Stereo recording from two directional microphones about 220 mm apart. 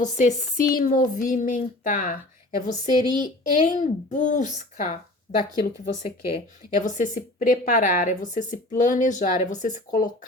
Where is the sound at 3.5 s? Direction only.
35° left (ahead or behind).